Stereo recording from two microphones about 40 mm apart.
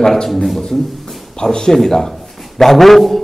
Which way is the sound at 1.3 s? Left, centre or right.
Centre.